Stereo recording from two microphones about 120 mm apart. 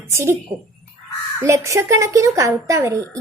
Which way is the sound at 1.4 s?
25° right (ahead or behind).